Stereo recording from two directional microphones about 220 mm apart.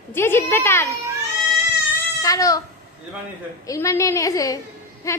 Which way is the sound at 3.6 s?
15° left (ahead or behind).